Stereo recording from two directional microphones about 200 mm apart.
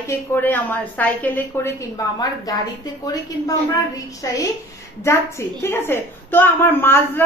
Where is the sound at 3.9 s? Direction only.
15° left (ahead or behind).